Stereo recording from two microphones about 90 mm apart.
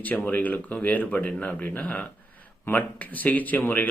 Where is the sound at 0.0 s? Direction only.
20° left (ahead or behind).